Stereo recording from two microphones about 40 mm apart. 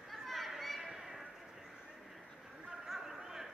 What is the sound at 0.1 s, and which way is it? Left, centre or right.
Children playing, centre.